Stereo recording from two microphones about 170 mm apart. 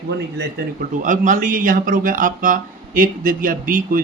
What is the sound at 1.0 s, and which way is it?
Speech, 50° right (ahead or behind).